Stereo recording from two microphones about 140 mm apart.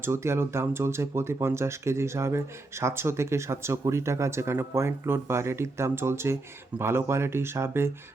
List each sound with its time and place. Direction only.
0.0 s speech: 20° right (ahead or behind)